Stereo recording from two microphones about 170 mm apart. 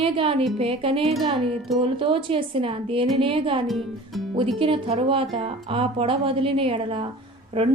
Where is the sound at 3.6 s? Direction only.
Centre (ahead or behind).